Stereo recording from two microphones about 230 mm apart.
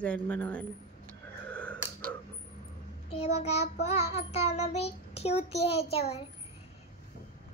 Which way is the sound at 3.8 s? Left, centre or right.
Left.